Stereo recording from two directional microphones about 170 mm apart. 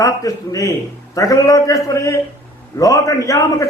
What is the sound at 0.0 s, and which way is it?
A man's voice, 20° left (ahead or behind).